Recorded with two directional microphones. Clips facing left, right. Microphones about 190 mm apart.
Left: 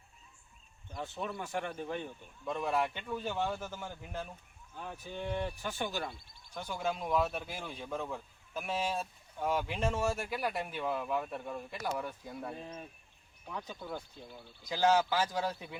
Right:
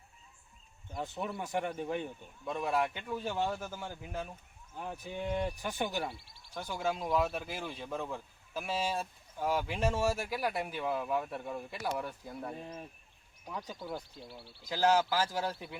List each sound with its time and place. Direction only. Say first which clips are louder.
1.0 s speech: even; 15° right (ahead or behind)